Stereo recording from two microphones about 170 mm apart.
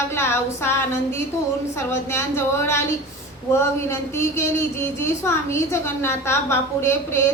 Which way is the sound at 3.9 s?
15° left (ahead or behind).